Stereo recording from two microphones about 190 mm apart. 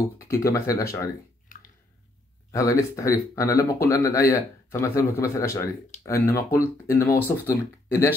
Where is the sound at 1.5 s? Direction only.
45° left (ahead or behind).